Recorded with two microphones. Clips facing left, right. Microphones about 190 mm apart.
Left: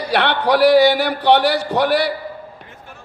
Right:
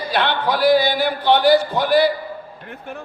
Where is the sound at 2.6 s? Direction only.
60° right (ahead or behind).